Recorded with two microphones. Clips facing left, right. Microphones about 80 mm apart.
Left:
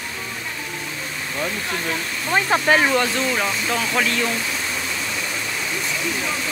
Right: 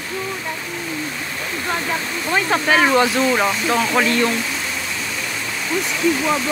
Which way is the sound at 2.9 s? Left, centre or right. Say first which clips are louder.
Right 4 dB; centre.